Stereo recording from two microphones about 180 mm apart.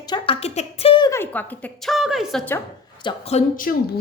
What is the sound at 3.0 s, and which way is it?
Speech, 35° left (ahead or behind).